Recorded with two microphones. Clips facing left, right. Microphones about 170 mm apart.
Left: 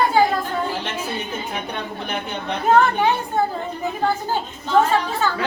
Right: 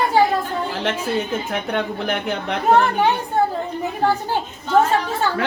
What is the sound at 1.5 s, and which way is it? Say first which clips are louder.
Speech: right 5 dB; 90° right.